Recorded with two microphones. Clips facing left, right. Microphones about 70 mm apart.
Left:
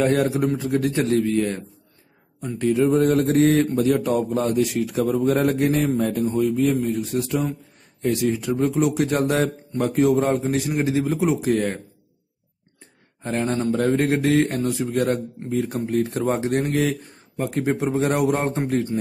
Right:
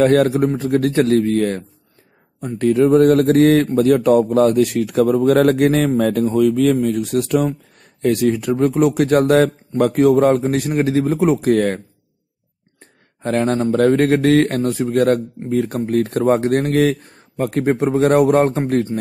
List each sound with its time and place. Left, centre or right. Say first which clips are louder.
0.0 s speech: right 6 dB; right
2.6 s speech: right 6 dB; right
13.2 s speech: right 6 dB; right
13.5 s a man's voice: right 5 dB; right
13.8 s speech: right 7 dB; right